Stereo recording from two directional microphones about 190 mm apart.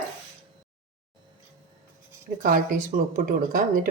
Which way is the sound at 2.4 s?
45° right (ahead or behind).